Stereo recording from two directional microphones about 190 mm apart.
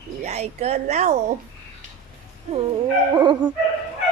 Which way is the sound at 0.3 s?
35° right (ahead or behind).